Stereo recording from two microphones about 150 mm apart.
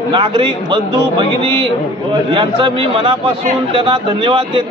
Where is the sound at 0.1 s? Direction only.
35° right (ahead or behind).